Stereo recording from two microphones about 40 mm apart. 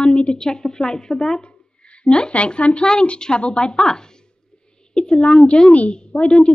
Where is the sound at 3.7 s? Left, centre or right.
Centre.